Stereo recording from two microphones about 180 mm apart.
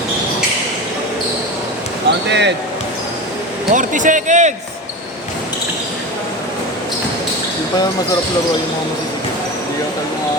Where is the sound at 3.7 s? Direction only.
45° right (ahead or behind).